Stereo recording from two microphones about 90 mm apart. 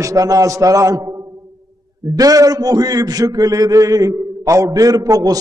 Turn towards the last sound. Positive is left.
turn(degrees=-40)  # may be behind; listen again after turning